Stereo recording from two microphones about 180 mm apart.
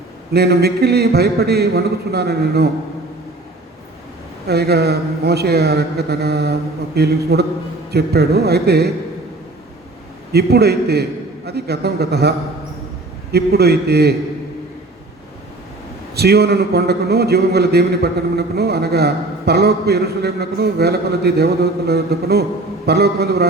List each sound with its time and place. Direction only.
0.3 s a man's voice: 65° right (ahead or behind)
4.4 s a man's voice: 60° right (ahead or behind)
10.3 s a man's voice: 60° right (ahead or behind)
13.3 s a man's voice: 60° right (ahead or behind)
16.1 s a man's voice: 65° right (ahead or behind)